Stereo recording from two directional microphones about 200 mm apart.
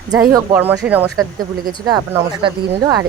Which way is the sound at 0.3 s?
10° right (ahead or behind).